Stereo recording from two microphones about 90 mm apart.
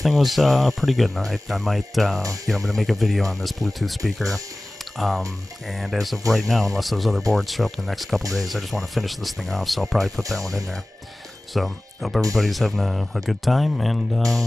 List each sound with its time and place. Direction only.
0.0 s speech: centre (ahead or behind)